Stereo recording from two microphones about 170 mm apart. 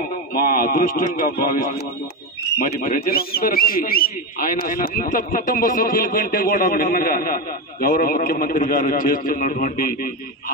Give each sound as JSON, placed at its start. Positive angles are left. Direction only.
{"t": 0.3, "sound": "speech", "side_deg": 60}
{"t": 2.6, "sound": "speech", "side_deg": 55}